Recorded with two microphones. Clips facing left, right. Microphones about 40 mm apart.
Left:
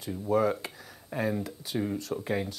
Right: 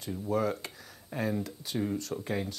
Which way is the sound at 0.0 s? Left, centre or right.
Centre.